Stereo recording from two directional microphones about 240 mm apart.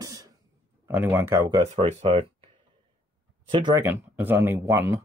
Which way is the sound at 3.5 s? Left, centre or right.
Centre.